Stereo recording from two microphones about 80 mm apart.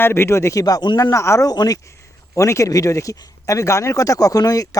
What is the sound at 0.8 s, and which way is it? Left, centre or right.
Speech, left.